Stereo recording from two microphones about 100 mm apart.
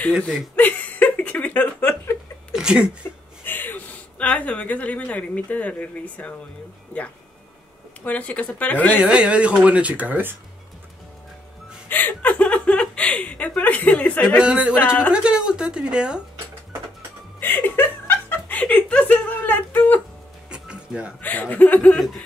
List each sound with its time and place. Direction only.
0.6 s laughter: 15° left (ahead or behind)
2.5 s a sound: 10° right (ahead or behind)
3.4 s speech: 20° left (ahead or behind)
8.0 s speech: 15° left (ahead or behind)
8.9 s speech: 10° right (ahead or behind)
11.9 s speech: 20° left (ahead or behind)
14.4 s speech: 10° right (ahead or behind)
17.4 s speech: 20° left (ahead or behind)
20.4 s music: 10° right (ahead or behind)
21.2 s speech: 15° left (ahead or behind)
21.9 s chuckle: centre (ahead or behind)